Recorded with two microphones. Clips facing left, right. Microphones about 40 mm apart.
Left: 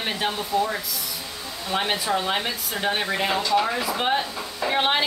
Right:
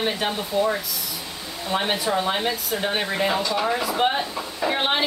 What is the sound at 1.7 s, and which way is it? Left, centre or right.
A woman's voice, centre.